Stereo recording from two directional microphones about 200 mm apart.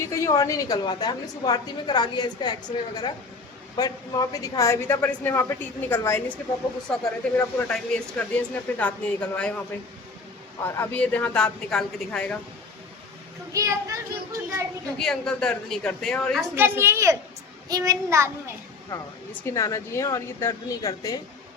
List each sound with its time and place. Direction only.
0.0 s a woman's voice: 15° left (ahead or behind)
10.6 s speech: 10° left (ahead or behind)
13.5 s a child's voice: 15° right (ahead or behind)
14.9 s speech: 5° left (ahead or behind)
16.6 s a child's voice: 10° right (ahead or behind)
18.9 s a woman's voice: 15° left (ahead or behind)